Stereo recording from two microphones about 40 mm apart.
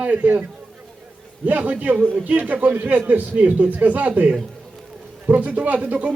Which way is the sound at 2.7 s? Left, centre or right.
Right.